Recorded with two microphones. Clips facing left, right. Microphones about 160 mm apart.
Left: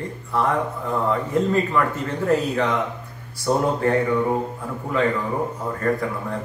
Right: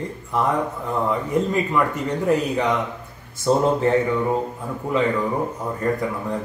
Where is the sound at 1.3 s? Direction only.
15° right (ahead or behind).